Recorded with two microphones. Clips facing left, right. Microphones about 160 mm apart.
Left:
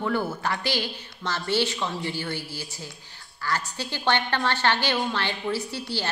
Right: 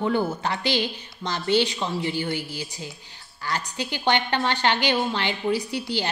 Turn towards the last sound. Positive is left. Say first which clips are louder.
# right 3 dB
turn(degrees=-15)  # may be behind; listen again after turning